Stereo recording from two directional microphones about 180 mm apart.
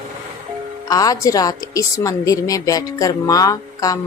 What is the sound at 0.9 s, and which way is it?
A woman's voice, 20° left (ahead or behind).